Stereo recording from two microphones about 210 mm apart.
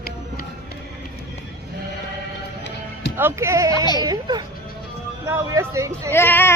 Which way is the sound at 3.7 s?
20° left (ahead or behind).